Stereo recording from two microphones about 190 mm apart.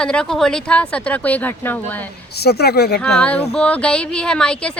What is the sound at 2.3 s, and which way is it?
Speech, 60° left (ahead or behind).